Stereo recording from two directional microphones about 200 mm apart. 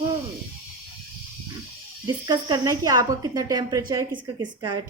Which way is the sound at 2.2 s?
20° right (ahead or behind).